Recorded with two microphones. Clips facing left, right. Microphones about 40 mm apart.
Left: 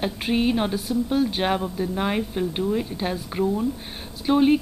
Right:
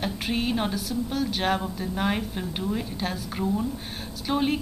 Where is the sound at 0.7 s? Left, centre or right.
Left.